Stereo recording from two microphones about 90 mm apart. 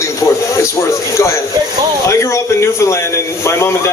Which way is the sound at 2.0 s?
35° left (ahead or behind).